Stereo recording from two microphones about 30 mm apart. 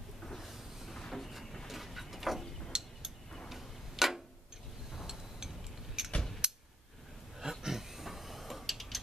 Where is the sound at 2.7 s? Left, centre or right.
Centre.